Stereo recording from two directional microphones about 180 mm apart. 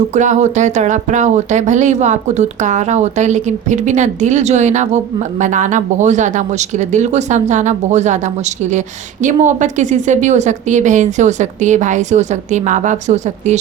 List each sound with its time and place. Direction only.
0.1 s speech: 40° right (ahead or behind)